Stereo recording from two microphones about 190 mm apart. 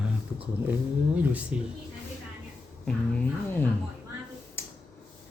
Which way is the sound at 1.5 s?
5° right (ahead or behind).